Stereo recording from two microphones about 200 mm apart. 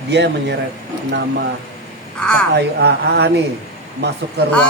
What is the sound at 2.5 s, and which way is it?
Speech, 55° right (ahead or behind).